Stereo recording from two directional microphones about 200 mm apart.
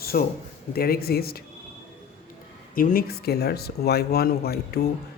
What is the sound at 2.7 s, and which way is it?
Speech, 45° left (ahead or behind).